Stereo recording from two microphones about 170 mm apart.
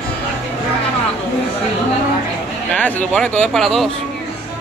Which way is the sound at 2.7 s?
10° left (ahead or behind).